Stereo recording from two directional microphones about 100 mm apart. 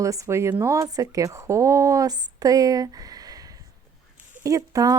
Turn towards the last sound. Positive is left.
turn(degrees=-35)  # may be behind; listen again after turning